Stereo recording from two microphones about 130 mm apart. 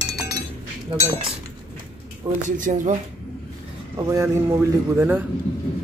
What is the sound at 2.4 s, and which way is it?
Speech, 75° right (ahead or behind).